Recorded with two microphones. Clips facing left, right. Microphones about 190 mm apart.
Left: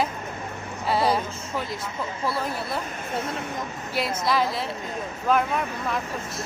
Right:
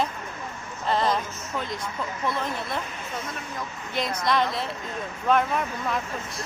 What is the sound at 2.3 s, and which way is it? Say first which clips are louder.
Speech: left 1 dB; 5° left (ahead or behind).